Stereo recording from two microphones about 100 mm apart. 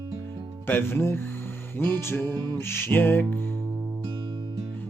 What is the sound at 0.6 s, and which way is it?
Music, 20° left (ahead or behind).